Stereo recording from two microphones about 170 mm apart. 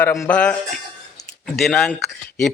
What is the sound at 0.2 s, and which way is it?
Speech, 5° left (ahead or behind).